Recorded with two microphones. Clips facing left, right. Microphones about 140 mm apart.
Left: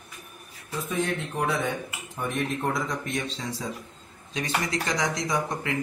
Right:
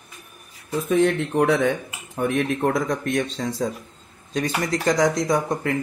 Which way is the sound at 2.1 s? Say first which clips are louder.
Right 7 dB; 65° right (ahead or behind).